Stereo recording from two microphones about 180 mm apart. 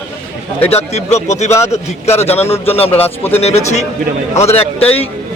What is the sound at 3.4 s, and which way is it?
A man's voice, 35° left (ahead or behind).